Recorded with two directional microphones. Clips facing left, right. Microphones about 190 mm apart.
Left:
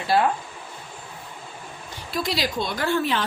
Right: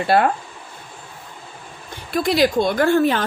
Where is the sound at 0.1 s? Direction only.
60° right (ahead or behind).